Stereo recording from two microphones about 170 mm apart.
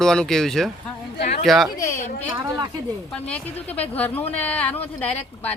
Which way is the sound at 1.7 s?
15° left (ahead or behind).